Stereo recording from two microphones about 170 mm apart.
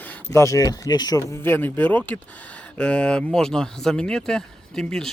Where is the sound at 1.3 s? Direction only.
15° left (ahead or behind).